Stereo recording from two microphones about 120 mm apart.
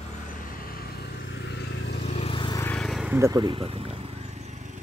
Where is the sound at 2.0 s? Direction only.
60° left (ahead or behind).